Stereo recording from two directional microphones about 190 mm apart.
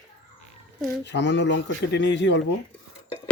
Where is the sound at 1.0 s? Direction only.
65° left (ahead or behind).